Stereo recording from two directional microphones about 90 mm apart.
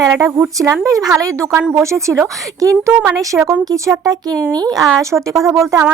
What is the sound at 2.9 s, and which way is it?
Speech, 15° right (ahead or behind).